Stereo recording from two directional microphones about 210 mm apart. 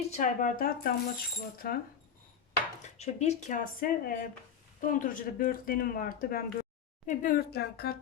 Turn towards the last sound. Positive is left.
turn(degrees=50)  # may be behind; listen again after turning